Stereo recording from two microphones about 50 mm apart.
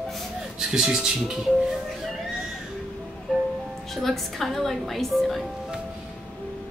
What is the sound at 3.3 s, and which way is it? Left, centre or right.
Music, centre.